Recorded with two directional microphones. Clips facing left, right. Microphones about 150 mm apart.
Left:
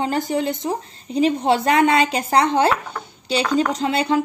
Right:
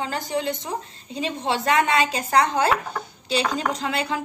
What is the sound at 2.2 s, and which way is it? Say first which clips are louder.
Speech: left 3 dB; 30° left (ahead or behind).